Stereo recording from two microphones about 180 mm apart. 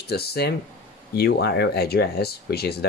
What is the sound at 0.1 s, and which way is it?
Speech, 60° left (ahead or behind).